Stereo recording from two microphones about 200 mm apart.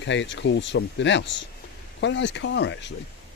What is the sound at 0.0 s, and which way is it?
Speech, 65° left (ahead or behind).